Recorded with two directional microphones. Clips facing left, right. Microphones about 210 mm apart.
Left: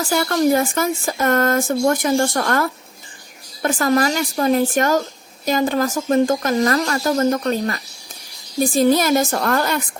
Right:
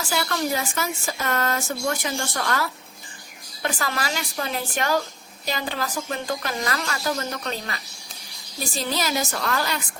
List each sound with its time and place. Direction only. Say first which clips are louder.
0.0 s speech: left 9 dB; 50° left (ahead or behind)